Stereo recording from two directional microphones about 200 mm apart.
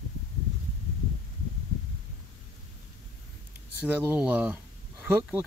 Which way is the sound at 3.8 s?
10° right (ahead or behind).